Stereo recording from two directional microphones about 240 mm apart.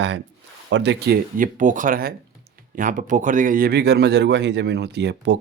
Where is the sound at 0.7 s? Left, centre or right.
Right.